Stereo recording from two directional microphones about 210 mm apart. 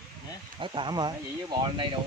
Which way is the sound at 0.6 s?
25° right (ahead or behind).